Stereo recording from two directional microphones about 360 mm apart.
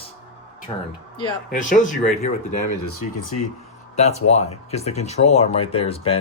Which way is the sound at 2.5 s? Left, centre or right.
Left.